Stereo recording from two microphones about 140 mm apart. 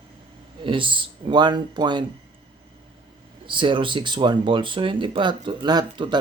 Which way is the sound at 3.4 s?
35° right (ahead or behind).